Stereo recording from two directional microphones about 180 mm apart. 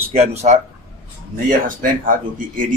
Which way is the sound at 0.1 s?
35° right (ahead or behind).